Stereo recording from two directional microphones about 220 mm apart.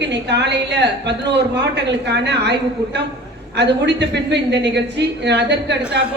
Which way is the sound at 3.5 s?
50° right (ahead or behind).